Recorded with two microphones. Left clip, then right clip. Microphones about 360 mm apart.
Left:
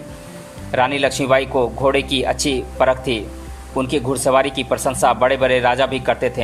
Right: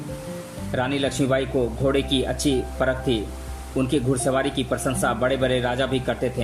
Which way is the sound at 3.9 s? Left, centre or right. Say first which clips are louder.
Left 7 dB; centre.